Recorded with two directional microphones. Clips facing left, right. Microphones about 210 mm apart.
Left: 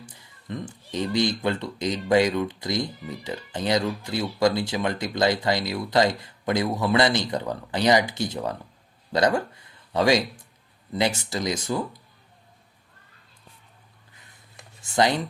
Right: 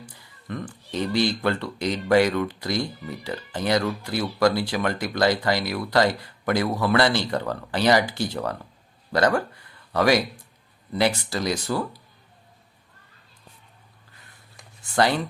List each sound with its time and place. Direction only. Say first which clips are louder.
0.0 s speech: right 1 dB; 20° left (ahead or behind)
14.1 s a sound: right 2 dB; 20° left (ahead or behind)
14.9 s speech: even; 20° left (ahead or behind)